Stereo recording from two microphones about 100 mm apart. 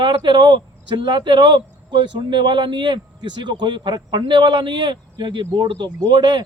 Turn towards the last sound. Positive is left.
turn(degrees=-50)  # may be behind; listen again after turning